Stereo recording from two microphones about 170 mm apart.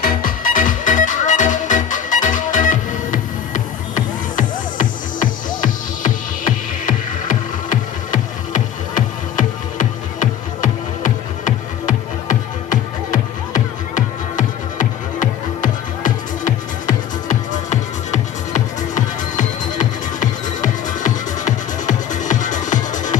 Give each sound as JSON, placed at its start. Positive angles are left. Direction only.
{"t": 0.0, "sound": "music", "side_deg": 55}